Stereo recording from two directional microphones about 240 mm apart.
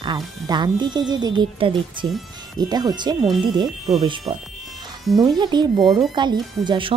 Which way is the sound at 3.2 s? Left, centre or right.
Centre.